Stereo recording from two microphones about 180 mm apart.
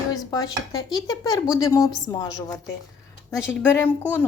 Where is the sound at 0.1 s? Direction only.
20° left (ahead or behind).